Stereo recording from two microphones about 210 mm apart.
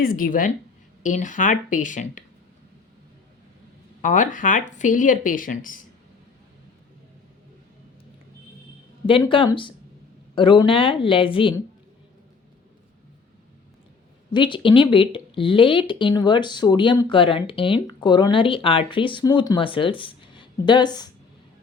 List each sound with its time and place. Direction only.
0.0 s speech: 40° left (ahead or behind)
4.0 s speech: 35° left (ahead or behind)
9.0 s speech: 25° left (ahead or behind)
14.3 s speech: 20° left (ahead or behind)